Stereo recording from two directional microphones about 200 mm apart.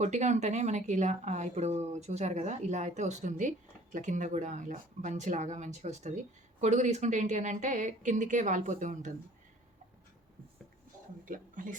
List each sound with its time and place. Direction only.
0.0 s a woman's voice: 35° right (ahead or behind)
11.3 s speech: 40° right (ahead or behind)